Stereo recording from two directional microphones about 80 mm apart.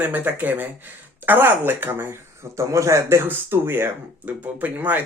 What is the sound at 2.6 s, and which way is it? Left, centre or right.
A man's voice, right.